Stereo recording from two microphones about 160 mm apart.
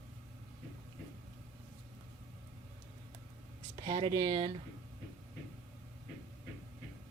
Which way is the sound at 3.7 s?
25° right (ahead or behind).